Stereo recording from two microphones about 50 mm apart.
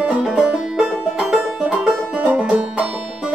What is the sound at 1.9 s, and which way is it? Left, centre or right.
Music, right.